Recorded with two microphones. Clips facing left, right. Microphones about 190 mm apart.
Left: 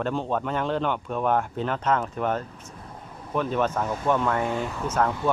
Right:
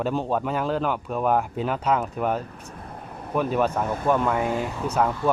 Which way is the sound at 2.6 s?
60° right (ahead or behind).